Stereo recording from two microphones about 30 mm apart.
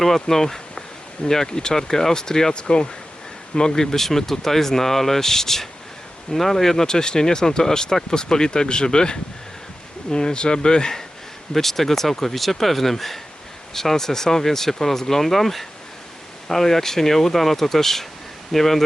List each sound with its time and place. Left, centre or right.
0.0 s speech: centre
2.5 s speech: left
11.5 s speech: centre